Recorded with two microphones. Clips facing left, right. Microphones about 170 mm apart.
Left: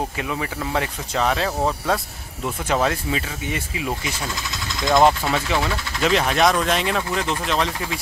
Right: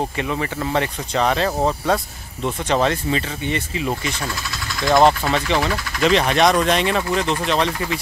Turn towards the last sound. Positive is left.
turn(degrees=0)  # may be behind; listen again after turning